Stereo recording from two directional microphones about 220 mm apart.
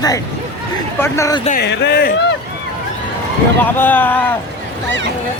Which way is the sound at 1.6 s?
50° left (ahead or behind).